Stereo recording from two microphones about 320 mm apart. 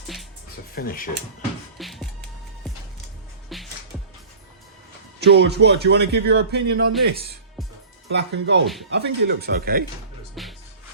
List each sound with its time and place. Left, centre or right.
0.8 s speech: left
1.8 s music: centre
3.5 s music: centre
5.2 s speech: right
8.1 s speech: right
10.4 s music: centre